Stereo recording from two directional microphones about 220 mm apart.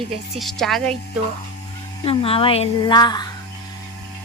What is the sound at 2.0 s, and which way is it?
A woman's voice, 25° left (ahead or behind).